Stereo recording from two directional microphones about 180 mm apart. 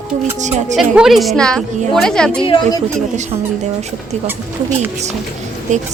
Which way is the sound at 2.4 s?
30° left (ahead or behind).